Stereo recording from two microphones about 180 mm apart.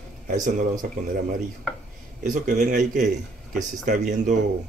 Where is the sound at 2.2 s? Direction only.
45° right (ahead or behind).